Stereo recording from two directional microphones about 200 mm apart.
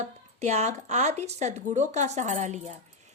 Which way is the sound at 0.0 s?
35° right (ahead or behind).